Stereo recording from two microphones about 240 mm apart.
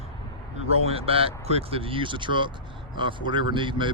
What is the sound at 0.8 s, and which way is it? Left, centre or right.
Speech, right.